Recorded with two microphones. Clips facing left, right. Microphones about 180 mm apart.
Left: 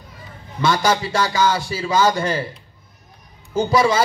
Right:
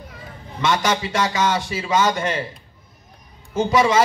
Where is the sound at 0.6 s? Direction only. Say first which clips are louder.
Left 2 dB; 35° left (ahead or behind).